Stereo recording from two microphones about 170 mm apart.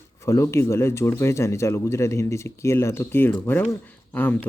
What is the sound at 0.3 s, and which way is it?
Speech, 15° left (ahead or behind).